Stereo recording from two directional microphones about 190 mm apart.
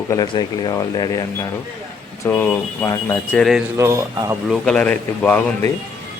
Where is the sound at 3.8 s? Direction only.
15° right (ahead or behind).